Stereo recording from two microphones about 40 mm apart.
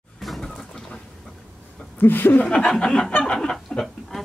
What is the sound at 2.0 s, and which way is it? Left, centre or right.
Speech, left.